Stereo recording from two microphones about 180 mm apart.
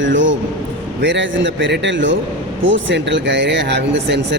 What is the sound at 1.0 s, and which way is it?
A man's voice, 90° right.